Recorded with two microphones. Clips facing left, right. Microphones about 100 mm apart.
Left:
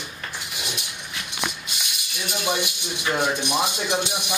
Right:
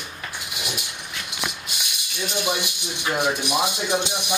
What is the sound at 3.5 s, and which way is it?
Speech, 10° right (ahead or behind).